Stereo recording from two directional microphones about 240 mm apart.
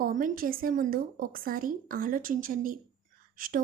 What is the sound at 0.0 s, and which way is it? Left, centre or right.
A woman's voice, right.